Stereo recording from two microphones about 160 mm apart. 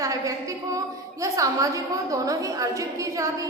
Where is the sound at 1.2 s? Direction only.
20° right (ahead or behind).